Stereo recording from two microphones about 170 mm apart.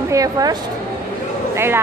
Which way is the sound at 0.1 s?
20° right (ahead or behind).